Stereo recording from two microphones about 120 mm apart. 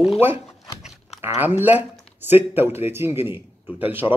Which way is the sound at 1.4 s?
15° right (ahead or behind).